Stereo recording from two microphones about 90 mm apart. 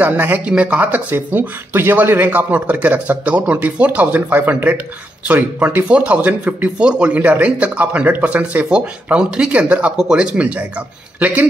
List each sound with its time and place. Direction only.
0.0 s speech: 20° right (ahead or behind)